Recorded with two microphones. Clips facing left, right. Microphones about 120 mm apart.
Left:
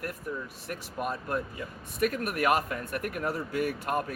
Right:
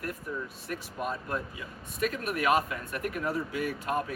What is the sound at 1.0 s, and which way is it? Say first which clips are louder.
Speech: left 2 dB; 50° left (ahead or behind).